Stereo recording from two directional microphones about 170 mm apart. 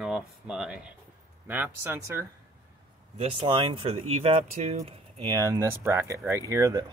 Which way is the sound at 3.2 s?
35° right (ahead or behind).